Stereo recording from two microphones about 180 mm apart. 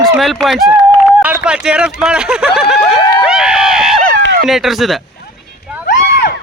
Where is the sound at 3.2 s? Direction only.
5° right (ahead or behind).